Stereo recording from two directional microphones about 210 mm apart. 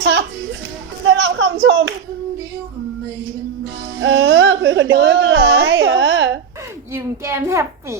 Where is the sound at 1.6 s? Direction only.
60° right (ahead or behind).